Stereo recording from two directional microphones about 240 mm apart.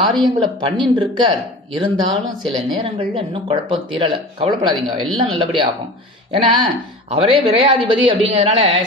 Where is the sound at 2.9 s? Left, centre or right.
Right.